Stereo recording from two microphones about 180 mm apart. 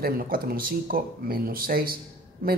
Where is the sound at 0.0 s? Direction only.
55° right (ahead or behind).